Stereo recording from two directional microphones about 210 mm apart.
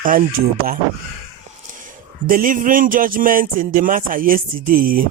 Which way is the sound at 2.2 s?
40° right (ahead or behind).